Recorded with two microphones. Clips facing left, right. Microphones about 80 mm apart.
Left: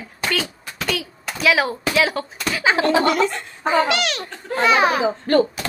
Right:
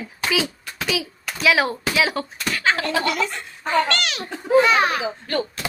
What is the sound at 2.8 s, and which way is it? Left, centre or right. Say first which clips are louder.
Speech: left 6 dB; left.